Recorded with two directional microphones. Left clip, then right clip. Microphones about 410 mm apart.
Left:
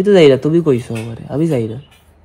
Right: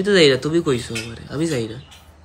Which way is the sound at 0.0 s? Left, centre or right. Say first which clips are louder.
Left 6 dB; centre.